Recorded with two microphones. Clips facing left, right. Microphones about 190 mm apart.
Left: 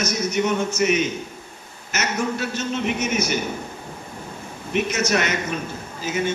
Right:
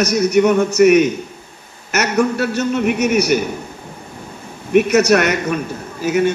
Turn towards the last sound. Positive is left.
turn(degrees=-65)  # may be behind; listen again after turning